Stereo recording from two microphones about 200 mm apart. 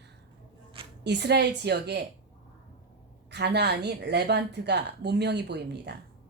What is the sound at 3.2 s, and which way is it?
Speech, 55° right (ahead or behind).